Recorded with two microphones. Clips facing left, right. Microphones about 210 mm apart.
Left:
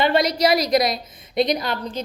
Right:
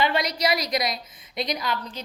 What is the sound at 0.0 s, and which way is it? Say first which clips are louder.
A woman's voice: left 6 dB; 45° left (ahead or behind).